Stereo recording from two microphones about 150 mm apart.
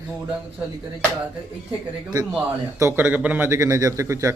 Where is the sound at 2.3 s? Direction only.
15° right (ahead or behind).